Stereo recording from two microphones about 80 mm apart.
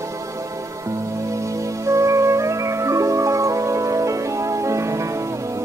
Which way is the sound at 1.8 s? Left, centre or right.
Right.